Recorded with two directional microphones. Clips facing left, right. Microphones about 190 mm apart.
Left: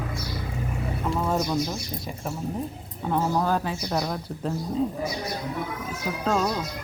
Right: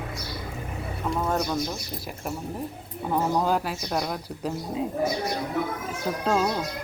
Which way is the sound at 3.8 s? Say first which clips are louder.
Left 1 dB; centre (ahead or behind).